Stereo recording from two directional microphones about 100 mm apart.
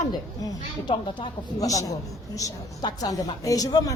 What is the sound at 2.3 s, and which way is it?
A woman's voice, 40° left (ahead or behind).